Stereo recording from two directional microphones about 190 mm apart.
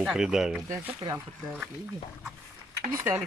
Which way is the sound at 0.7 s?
15° right (ahead or behind).